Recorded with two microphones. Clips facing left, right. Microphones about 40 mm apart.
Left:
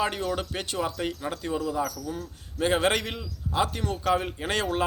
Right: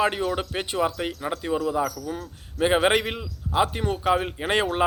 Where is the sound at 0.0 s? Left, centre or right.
Centre.